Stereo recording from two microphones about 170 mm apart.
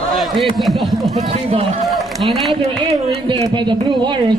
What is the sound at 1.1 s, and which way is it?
Speech, 40° right (ahead or behind).